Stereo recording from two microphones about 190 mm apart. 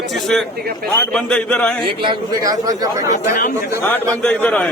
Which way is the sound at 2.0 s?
20° right (ahead or behind).